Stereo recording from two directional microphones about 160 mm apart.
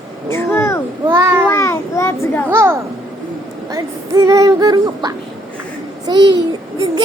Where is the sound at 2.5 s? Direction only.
15° right (ahead or behind).